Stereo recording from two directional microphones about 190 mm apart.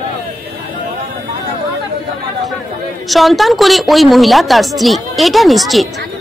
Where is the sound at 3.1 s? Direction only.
Centre (ahead or behind).